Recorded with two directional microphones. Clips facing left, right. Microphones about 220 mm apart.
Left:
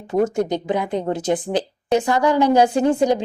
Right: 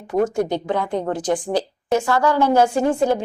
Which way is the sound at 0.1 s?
20° left (ahead or behind).